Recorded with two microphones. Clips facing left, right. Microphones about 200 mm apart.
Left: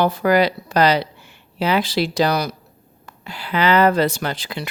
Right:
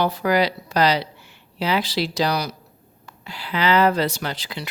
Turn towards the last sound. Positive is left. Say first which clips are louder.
# left 4 dB
turn(degrees=50)  # may be behind; listen again after turning